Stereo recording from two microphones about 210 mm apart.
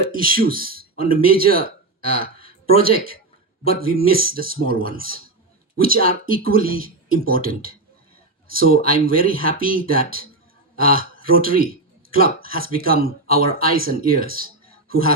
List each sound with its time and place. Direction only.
0.1 s a man's voice: 45° right (ahead or behind)